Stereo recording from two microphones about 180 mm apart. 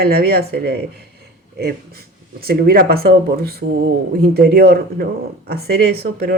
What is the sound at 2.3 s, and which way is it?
Speech, 55° right (ahead or behind).